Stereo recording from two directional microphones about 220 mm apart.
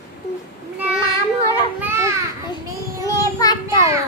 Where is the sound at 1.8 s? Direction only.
10° right (ahead or behind).